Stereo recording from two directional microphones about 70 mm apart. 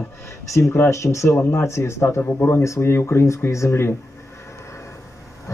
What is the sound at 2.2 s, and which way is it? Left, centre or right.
Speech, left.